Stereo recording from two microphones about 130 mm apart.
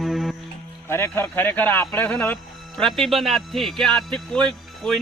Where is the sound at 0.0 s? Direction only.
Centre (ahead or behind).